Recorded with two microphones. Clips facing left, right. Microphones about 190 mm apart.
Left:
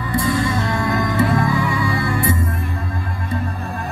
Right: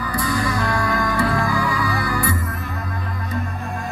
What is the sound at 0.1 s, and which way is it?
Music, 25° left (ahead or behind).